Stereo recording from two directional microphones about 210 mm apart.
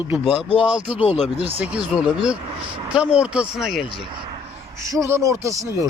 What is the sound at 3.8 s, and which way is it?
Speech, 20° right (ahead or behind).